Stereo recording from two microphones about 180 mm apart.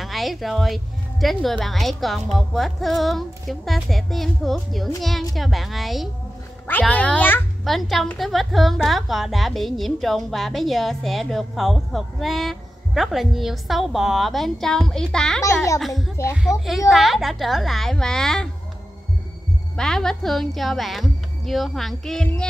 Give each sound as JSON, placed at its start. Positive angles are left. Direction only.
{"t": 0.0, "sound": "a woman's voice", "side_deg": 0}
{"t": 15.4, "sound": "a child's voice", "side_deg": 15}
{"t": 15.8, "sound": "a woman's voice", "side_deg": 0}
{"t": 19.8, "sound": "a woman's voice", "side_deg": 5}